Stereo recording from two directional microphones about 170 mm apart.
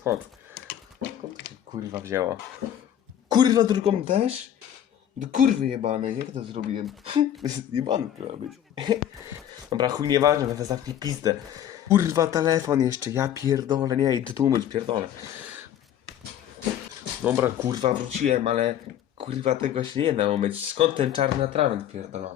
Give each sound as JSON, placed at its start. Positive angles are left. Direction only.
{"t": 1.9, "sound": "speech", "side_deg": -15}
{"t": 4.0, "sound": "speech", "side_deg": -40}
{"t": 6.0, "sound": "speech", "side_deg": -35}
{"t": 17.2, "sound": "speech", "side_deg": -15}
{"t": 17.8, "sound": "speech", "side_deg": -40}